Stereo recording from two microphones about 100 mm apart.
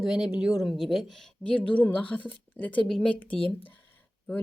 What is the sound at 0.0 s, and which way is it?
Speech, 5° right (ahead or behind).